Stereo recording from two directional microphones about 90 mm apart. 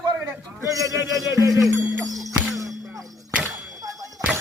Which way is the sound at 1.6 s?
Centre (ahead or behind).